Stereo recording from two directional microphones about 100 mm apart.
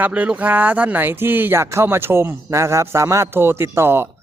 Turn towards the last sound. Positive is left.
turn(degrees=-25)  # may be behind; listen again after turning